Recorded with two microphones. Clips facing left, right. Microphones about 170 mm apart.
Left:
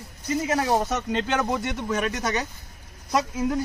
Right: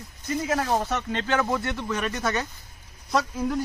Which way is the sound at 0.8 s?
20° left (ahead or behind).